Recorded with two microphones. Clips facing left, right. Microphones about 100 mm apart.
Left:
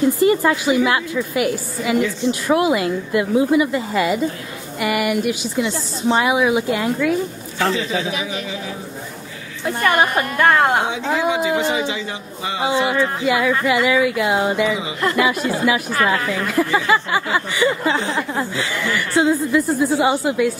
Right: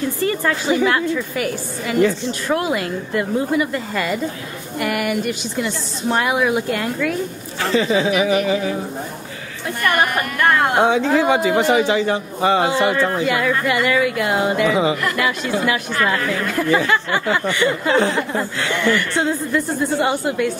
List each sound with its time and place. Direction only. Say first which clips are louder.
0.2 s a woman's voice: left 4 dB; 10° left (ahead or behind)
7.7 s speech: right 5 dB; 50° right (ahead or behind)
8.1 s a sound: right 9 dB; 70° right (ahead or behind)
9.8 s a woman's voice: left 1 dB; 20° left (ahead or behind)
11.1 s a man's voice: right 3 dB; 55° right (ahead or behind)
12.6 s a woman's voice: right 1 dB; centre (ahead or behind)